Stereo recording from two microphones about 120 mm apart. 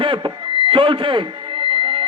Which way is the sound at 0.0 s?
40° right (ahead or behind).